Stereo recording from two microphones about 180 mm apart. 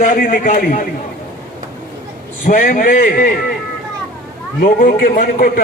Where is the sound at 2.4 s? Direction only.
50° left (ahead or behind).